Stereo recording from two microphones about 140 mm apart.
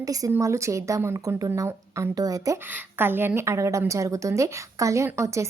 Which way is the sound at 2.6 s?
15° right (ahead or behind).